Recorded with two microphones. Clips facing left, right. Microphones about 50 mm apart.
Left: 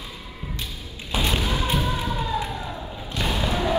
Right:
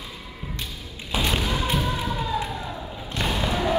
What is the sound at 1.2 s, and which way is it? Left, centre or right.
Thump, right.